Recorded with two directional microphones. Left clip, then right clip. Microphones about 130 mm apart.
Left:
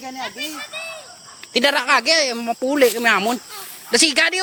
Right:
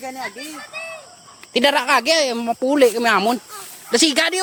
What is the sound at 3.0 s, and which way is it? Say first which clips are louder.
Speech: right 1 dB; 40° right (ahead or behind).